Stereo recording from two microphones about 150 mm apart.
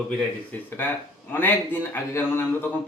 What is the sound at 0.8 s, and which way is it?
Speech, 15° left (ahead or behind).